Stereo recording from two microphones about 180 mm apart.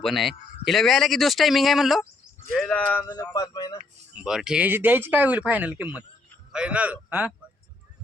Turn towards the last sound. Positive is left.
turn(degrees=-5)  # may be behind; listen again after turning